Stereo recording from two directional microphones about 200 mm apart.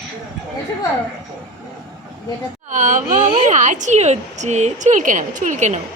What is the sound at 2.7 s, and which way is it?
A woman's voice, 40° right (ahead or behind).